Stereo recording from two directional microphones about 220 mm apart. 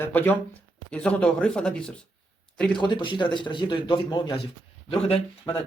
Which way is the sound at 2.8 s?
20° left (ahead or behind).